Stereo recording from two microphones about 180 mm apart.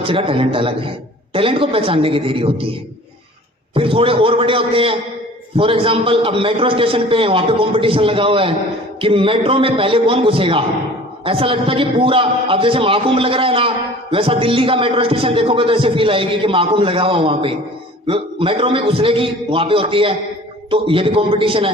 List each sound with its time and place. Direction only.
0.0 s a man's voice: 30° right (ahead or behind)
3.8 s a man's voice: 30° right (ahead or behind)